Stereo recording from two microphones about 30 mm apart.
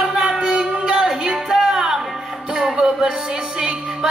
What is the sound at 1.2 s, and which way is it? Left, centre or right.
Music, right.